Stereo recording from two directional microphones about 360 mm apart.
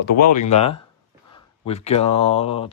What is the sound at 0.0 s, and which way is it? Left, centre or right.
Speech, left.